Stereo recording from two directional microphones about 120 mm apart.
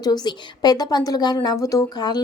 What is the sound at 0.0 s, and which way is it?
Speech, 35° left (ahead or behind).